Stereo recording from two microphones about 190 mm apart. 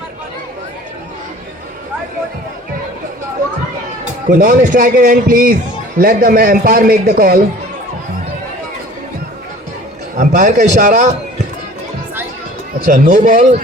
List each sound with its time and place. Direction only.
4.3 s a man's voice: 45° right (ahead or behind)
10.2 s a man's voice: 40° right (ahead or behind)
12.8 s a man's voice: 45° right (ahead or behind)